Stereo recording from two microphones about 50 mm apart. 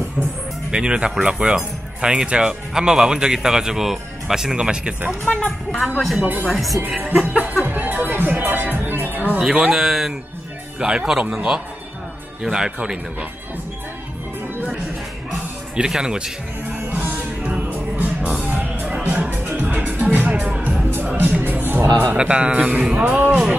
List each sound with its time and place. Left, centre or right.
0.7 s speech: centre
5.2 s speech: left
5.9 s speech: centre
7.2 s speech: right
7.6 s music: right
9.4 s speech: centre
9.7 s speech: centre
10.8 s speech: centre
15.7 s speech: centre
16.9 s music: right
19.0 s music: right
20.2 s music: right
21.3 s music: right
22.1 s speech: right